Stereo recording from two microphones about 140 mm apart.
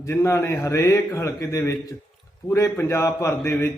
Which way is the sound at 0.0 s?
20° left (ahead or behind).